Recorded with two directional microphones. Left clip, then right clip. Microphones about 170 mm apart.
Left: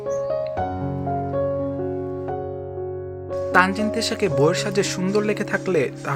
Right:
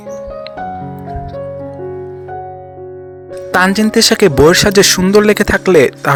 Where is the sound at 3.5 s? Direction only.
45° right (ahead or behind).